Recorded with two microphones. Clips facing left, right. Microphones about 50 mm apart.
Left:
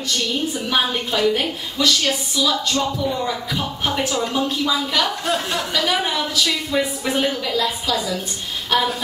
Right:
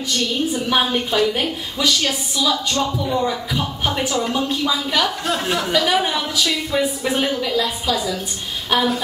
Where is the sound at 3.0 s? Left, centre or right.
Centre.